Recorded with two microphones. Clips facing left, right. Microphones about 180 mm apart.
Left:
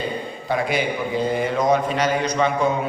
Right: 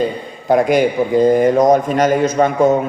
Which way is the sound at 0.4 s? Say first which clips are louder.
Right 10 dB; 45° right (ahead or behind).